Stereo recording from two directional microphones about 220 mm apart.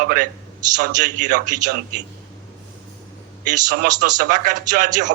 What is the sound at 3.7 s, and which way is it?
A man's voice, 35° right (ahead or behind).